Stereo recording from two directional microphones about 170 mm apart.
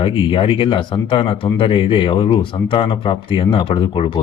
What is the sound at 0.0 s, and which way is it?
Speech, 30° left (ahead or behind).